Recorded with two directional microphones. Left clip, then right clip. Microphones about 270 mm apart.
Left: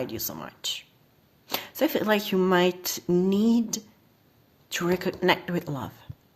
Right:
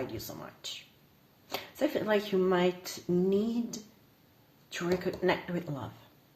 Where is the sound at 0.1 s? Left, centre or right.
Left.